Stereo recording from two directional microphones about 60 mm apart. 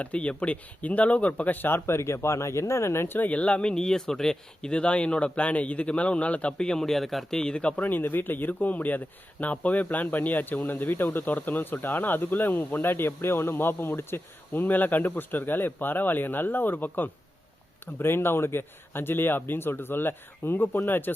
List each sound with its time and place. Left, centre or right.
0.0 s a man's voice: left
3.2 s speech: left
7.9 s a man's voice: left